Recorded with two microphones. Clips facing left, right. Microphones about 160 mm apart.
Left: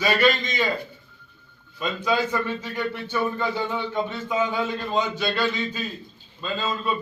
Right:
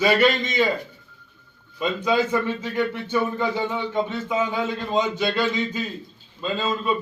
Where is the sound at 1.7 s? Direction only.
20° right (ahead or behind).